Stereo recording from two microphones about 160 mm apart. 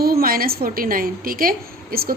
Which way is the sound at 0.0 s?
70° right (ahead or behind).